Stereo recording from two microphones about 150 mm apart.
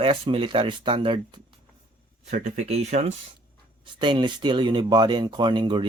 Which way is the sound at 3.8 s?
30° right (ahead or behind).